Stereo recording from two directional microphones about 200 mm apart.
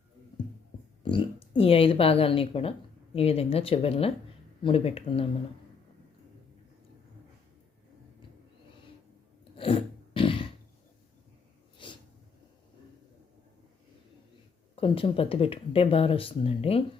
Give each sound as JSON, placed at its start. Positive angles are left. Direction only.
{"t": 1.0, "sound": "speech", "side_deg": 25}
{"t": 9.4, "sound": "a sound", "side_deg": 25}
{"t": 11.8, "sound": "snort", "side_deg": 25}
{"t": 14.8, "sound": "speech", "side_deg": 25}